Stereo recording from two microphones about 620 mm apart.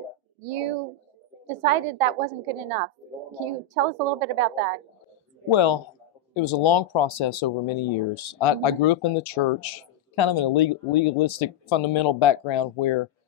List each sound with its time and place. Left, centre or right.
0.4 s a woman's voice: right
5.5 s speech: left